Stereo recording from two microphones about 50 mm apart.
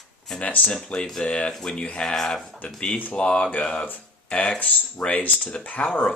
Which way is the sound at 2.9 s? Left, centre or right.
Left.